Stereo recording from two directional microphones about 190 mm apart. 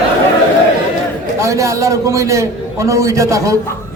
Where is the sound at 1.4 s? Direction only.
15° right (ahead or behind).